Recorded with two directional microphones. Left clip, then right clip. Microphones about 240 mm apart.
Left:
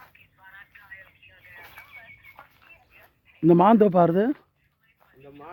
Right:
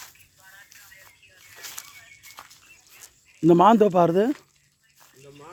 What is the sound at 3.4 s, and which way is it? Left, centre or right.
Speech, centre.